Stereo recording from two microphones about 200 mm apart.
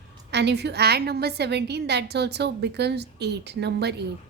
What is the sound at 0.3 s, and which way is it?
A woman's voice, 55° right (ahead or behind).